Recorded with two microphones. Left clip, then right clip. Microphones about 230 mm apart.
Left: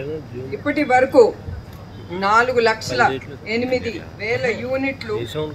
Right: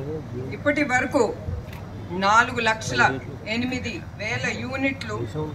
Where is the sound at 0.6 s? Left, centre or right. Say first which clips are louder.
Left 5 dB; left.